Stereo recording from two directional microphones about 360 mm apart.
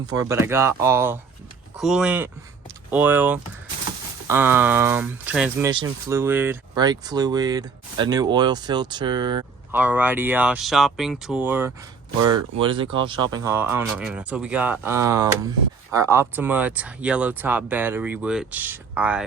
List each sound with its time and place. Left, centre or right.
0.0 s speech: centre
12.2 s speech: right
12.5 s speech: centre